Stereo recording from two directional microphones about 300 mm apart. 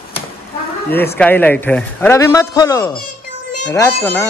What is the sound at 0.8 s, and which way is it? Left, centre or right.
A man's voice, centre.